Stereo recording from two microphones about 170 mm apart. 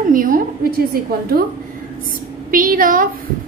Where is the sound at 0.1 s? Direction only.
55° right (ahead or behind).